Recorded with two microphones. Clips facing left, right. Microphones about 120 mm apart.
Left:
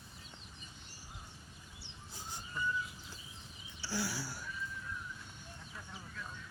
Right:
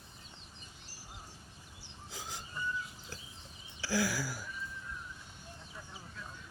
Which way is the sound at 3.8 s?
90° right.